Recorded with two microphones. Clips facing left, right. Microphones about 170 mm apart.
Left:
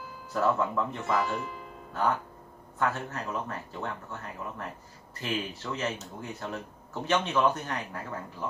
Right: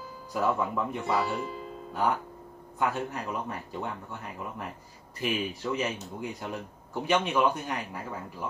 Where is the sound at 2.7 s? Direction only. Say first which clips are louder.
Right 1 dB; 15° right (ahead or behind).